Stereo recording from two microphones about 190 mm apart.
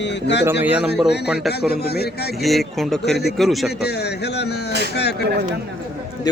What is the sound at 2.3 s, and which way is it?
Speech, centre (ahead or behind).